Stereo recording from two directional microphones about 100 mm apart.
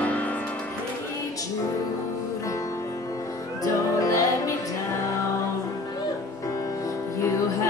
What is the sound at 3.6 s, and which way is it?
Music, 35° left (ahead or behind).